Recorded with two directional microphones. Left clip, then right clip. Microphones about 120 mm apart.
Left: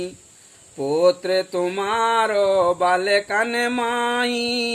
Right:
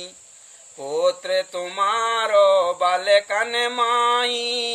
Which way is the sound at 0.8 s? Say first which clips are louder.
Left 4 dB; 40° left (ahead or behind).